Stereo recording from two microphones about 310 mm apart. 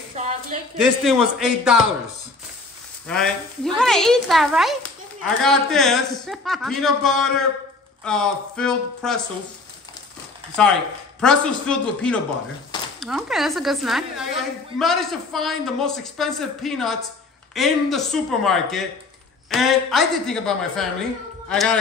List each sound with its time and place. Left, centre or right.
0.2 s a sound: right
0.7 s a woman's voice: centre
3.1 s a woman's voice: centre
11.1 s a woman's voice: centre